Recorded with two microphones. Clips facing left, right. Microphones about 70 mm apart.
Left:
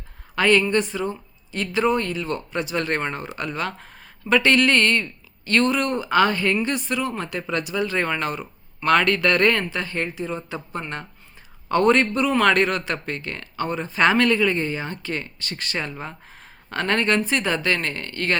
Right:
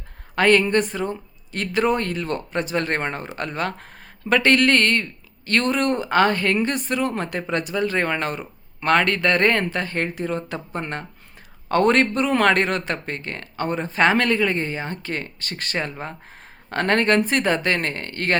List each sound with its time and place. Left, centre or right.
0.3 s a woman's voice: right
10.7 s a man's voice: right